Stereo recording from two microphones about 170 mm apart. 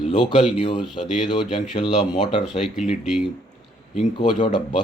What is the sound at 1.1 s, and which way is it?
Speech, 45° left (ahead or behind).